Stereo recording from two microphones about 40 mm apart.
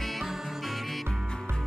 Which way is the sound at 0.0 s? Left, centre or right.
Centre.